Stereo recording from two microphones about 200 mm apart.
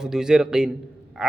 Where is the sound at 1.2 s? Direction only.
5° right (ahead or behind).